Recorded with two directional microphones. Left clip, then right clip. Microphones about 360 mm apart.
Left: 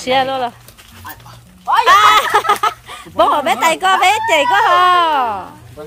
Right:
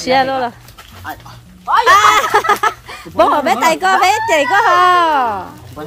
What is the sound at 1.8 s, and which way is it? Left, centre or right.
Speech, centre.